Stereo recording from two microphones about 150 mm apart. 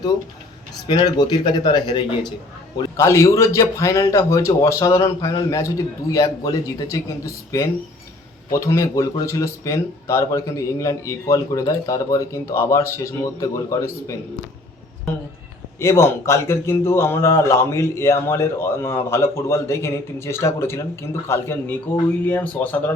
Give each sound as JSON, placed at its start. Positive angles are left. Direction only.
{"t": 0.9, "sound": "speech", "side_deg": 30}
{"t": 3.0, "sound": "speech", "side_deg": 20}
{"t": 15.8, "sound": "speech", "side_deg": 15}